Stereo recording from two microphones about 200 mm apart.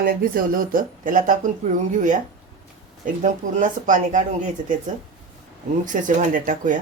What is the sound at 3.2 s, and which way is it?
Speech, 40° right (ahead or behind).